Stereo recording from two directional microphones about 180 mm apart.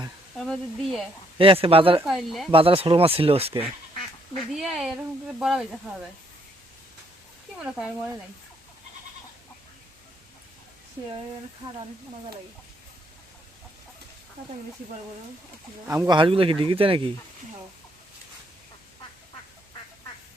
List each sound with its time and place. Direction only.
0.3 s speech: centre (ahead or behind)
1.4 s speech: 30° right (ahead or behind)
2.0 s speech: centre (ahead or behind)
2.5 s speech: 30° right (ahead or behind)
4.5 s speech: centre (ahead or behind)
7.6 s speech: 5° right (ahead or behind)
15.9 s speech: 20° right (ahead or behind)